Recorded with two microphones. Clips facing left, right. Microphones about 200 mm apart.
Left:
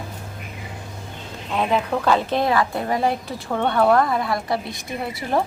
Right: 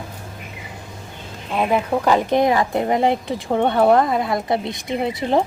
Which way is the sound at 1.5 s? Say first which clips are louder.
Right 2 dB; 10° right (ahead or behind).